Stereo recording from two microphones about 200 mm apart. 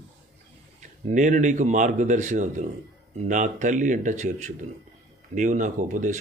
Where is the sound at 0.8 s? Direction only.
40° right (ahead or behind).